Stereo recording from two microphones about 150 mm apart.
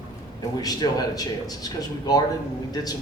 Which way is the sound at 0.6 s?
25° left (ahead or behind).